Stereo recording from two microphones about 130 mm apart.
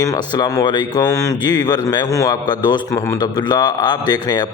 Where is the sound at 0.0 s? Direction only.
30° left (ahead or behind).